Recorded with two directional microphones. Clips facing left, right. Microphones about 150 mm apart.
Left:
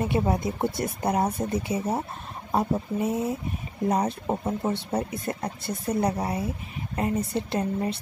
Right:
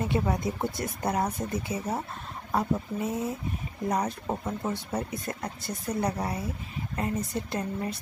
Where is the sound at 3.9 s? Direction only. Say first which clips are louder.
Left 3 dB; 25° left (ahead or behind).